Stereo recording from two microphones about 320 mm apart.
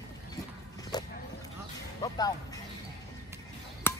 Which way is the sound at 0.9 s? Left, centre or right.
Centre.